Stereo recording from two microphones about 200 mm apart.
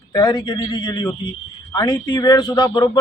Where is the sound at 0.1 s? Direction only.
20° left (ahead or behind).